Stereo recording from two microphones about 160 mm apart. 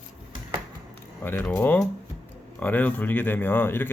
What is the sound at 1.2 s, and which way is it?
A man's voice, 10° left (ahead or behind).